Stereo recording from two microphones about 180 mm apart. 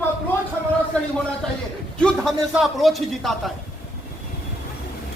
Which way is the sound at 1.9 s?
5° left (ahead or behind).